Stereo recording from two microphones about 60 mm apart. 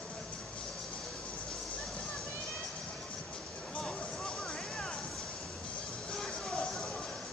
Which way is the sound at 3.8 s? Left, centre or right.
Centre.